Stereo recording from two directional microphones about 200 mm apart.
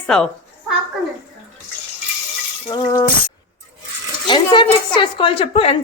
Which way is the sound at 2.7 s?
20° left (ahead or behind).